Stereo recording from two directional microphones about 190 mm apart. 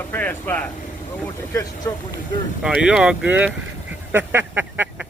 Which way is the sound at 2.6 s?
5° right (ahead or behind).